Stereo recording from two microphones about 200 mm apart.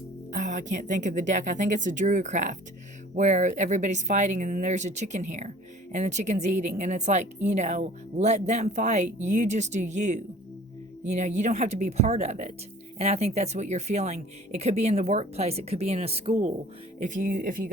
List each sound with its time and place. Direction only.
0.3 s speech: 40° right (ahead or behind)